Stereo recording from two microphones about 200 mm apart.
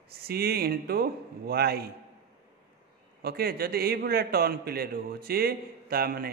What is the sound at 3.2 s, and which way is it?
A man's voice, 50° right (ahead or behind).